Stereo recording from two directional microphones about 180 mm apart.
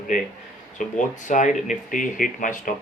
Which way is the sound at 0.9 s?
45° left (ahead or behind).